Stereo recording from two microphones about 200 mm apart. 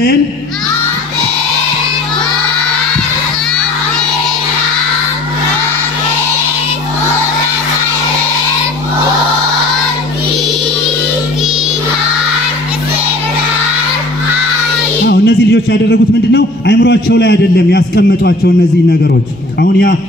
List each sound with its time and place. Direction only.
15.0 s a man's voice: 55° left (ahead or behind)